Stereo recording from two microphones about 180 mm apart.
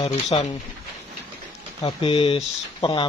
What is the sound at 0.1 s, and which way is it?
Speech, 35° left (ahead or behind).